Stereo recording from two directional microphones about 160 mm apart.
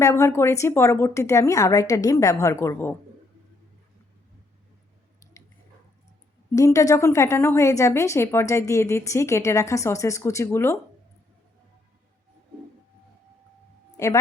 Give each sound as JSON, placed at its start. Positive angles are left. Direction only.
{"t": 0.0, "sound": "speech", "side_deg": 20}
{"t": 6.6, "sound": "a woman's voice", "side_deg": 20}
{"t": 13.9, "sound": "a sound", "side_deg": 20}